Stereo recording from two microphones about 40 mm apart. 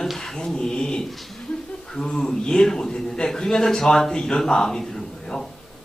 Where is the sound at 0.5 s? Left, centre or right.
Centre.